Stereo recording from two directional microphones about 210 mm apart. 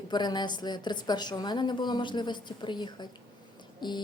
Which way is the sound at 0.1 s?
20° left (ahead or behind).